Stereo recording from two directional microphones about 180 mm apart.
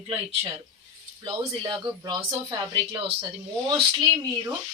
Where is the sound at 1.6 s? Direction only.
25° right (ahead or behind).